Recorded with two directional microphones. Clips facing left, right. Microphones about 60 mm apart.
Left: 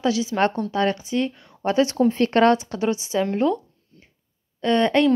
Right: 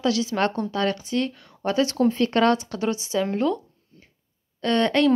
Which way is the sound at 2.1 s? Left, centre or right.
Left.